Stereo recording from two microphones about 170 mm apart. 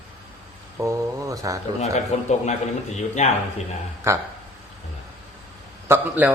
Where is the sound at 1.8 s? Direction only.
40° left (ahead or behind).